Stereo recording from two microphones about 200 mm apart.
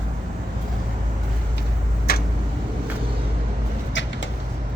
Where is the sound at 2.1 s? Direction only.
50° left (ahead or behind).